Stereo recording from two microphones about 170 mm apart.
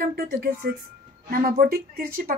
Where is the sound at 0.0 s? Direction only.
65° right (ahead or behind).